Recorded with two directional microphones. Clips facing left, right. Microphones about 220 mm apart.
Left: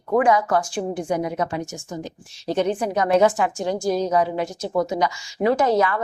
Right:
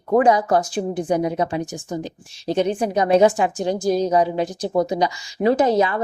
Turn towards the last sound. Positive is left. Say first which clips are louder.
# right 2 dB
turn(degrees=-20)  # may be behind; listen again after turning